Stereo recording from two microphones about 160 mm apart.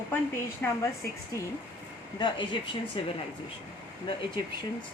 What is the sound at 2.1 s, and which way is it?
Speech, 30° left (ahead or behind).